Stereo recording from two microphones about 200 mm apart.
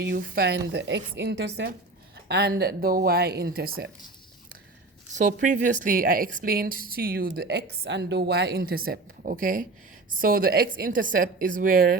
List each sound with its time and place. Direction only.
0.1 s a woman's voice: 55° right (ahead or behind)
5.1 s a woman's voice: 40° right (ahead or behind)